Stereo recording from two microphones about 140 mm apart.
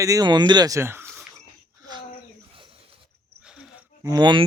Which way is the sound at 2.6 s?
40° right (ahead or behind).